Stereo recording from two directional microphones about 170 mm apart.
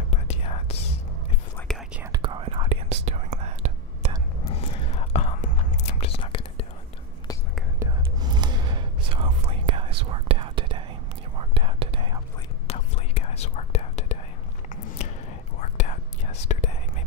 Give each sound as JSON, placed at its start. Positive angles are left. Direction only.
{"t": 0.1, "sound": "whispering", "side_deg": 35}
{"t": 1.7, "sound": "whispering", "side_deg": 5}
{"t": 2.1, "sound": "whispering", "side_deg": -30}
{"t": 4.6, "sound": "whispering", "side_deg": 35}
{"t": 7.8, "sound": "whispering", "side_deg": -25}
{"t": 12.6, "sound": "whispering", "side_deg": 35}
{"t": 15.6, "sound": "whispering", "side_deg": 45}